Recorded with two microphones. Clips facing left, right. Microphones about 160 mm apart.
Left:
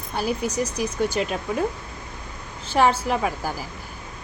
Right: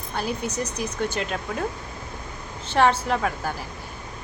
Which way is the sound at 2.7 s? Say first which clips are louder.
Even; 10° left (ahead or behind).